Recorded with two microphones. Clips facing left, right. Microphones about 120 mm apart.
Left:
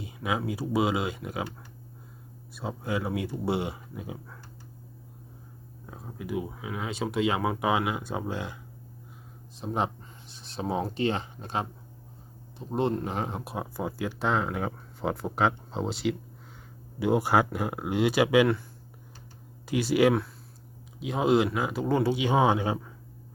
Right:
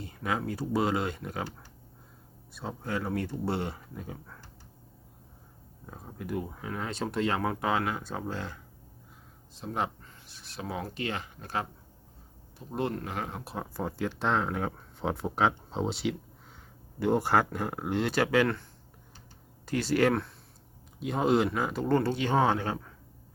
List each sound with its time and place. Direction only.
0.0 s speech: 5° left (ahead or behind)
2.5 s speech: 5° left (ahead or behind)
5.8 s speech: centre (ahead or behind)
9.6 s speech: 20° left (ahead or behind)
19.6 s speech: 10° left (ahead or behind)